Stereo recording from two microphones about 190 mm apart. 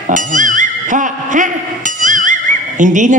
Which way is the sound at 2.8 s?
40° right (ahead or behind).